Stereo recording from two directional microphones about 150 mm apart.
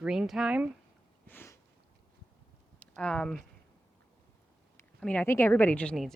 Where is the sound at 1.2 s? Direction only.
15° left (ahead or behind).